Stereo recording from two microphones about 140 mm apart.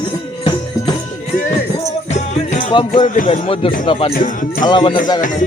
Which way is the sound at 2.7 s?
35° left (ahead or behind).